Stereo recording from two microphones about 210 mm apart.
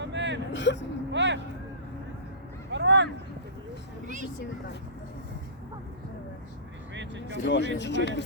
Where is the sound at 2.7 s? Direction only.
55° right (ahead or behind).